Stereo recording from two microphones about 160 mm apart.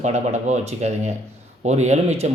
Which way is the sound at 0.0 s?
45° right (ahead or behind).